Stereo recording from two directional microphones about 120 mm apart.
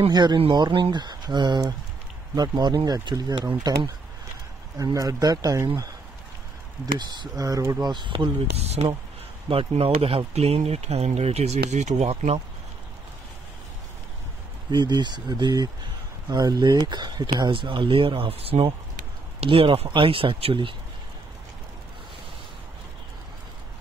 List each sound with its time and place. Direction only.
0.1 s speech: 35° right (ahead or behind)
7.0 s speech: 35° right (ahead or behind)
7.8 s speech: 40° right (ahead or behind)
8.5 s speech: 60° right (ahead or behind)
9.5 s speech: 50° right (ahead or behind)
14.7 s speech: 40° right (ahead or behind)